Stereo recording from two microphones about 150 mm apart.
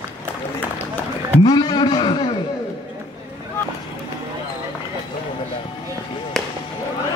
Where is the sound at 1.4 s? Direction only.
30° left (ahead or behind).